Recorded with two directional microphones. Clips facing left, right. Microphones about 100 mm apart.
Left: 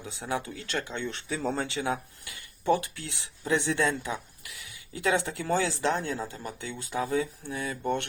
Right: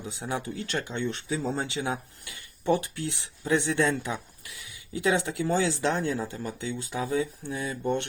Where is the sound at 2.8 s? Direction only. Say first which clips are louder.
Right 7 dB; 30° right (ahead or behind).